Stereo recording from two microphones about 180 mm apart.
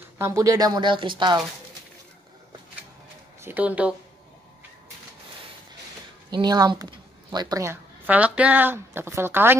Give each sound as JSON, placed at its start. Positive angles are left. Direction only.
{"t": 0.2, "sound": "speech", "side_deg": -15}
{"t": 3.3, "sound": "speech", "side_deg": -10}
{"t": 6.3, "sound": "a woman's voice", "side_deg": -20}